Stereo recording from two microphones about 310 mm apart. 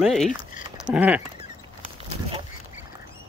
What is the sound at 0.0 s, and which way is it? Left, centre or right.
Rodents, centre.